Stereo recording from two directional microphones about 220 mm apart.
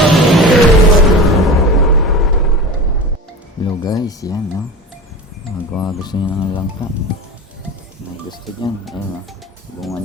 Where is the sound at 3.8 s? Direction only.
15° left (ahead or behind).